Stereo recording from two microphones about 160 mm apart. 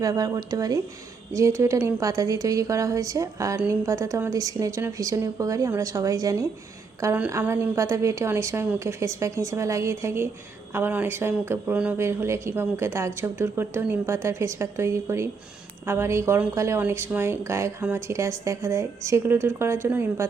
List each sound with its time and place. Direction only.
0.0 s a woman's voice: 25° right (ahead or behind)